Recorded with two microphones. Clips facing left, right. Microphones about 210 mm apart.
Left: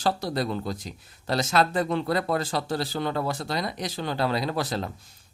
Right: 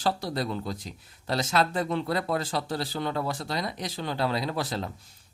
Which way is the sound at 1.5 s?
45° left (ahead or behind).